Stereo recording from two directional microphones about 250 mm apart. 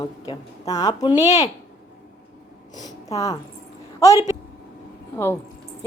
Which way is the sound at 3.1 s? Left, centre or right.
Centre.